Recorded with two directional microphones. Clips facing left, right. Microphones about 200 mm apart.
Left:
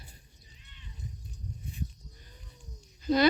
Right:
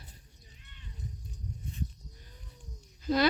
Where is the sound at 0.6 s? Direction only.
50° right (ahead or behind).